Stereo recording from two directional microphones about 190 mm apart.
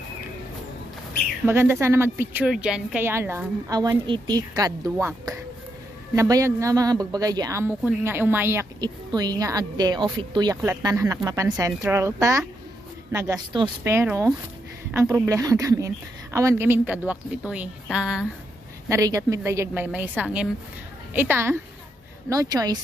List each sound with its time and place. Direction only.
1.5 s a woman's voice: 15° right (ahead or behind)
18.9 s a woman's voice: 15° right (ahead or behind)